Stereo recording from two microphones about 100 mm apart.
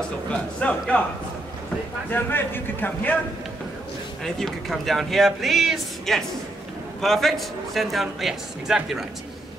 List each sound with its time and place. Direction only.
0.3 s a man's voice: 10° left (ahead or behind)
2.0 s a man's voice: 20° left (ahead or behind)
4.2 s speech: 5° left (ahead or behind)